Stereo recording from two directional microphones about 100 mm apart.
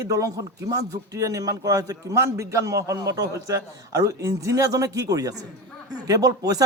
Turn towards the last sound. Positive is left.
turn(degrees=-35)  # may be behind; listen again after turning